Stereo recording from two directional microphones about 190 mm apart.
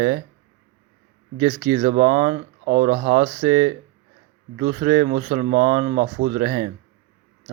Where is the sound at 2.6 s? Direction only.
50° right (ahead or behind).